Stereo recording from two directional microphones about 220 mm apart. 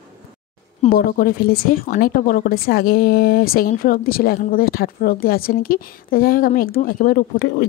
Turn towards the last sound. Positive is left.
turn(degrees=45)  # may be behind; listen again after turning